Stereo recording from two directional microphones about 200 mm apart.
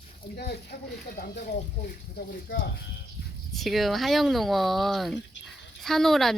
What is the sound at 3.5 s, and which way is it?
Speech, centre (ahead or behind).